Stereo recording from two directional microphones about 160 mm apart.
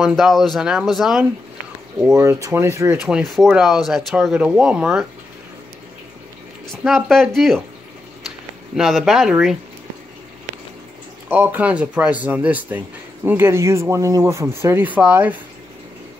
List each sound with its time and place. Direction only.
0.0 s speech: centre (ahead or behind)
2.1 s speech: 20° right (ahead or behind)
3.1 s speech: centre (ahead or behind)
6.7 s speech: centre (ahead or behind)
8.7 s speech: centre (ahead or behind)
11.2 s speech: 10° right (ahead or behind)